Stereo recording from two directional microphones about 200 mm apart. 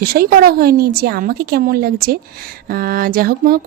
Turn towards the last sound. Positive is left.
turn(degrees=-50)  # may be behind; listen again after turning